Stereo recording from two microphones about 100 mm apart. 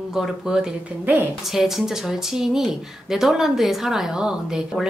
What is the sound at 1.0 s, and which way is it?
Speech, 20° right (ahead or behind).